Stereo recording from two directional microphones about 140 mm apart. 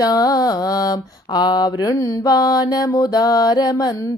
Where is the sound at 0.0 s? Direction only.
25° left (ahead or behind).